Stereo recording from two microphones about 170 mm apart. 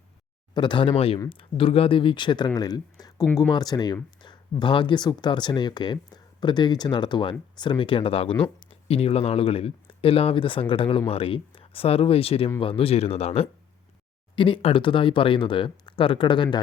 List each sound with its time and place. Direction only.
0.5 s speech: 30° left (ahead or behind)